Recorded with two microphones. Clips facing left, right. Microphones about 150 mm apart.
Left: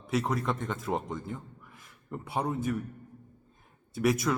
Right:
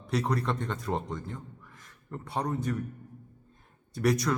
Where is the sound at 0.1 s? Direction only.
Centre (ahead or behind).